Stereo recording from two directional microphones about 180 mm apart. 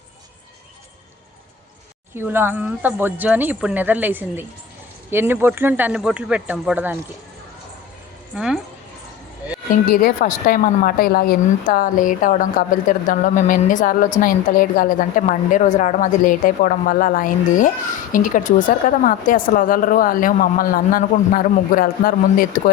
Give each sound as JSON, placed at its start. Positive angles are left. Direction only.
{"t": 2.1, "sound": "a woman's voice", "side_deg": -10}
{"t": 8.4, "sound": "speech", "side_deg": -5}
{"t": 9.9, "sound": "speech", "side_deg": 50}